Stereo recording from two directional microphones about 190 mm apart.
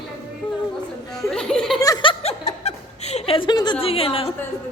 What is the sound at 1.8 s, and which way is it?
Chuckle, 20° left (ahead or behind).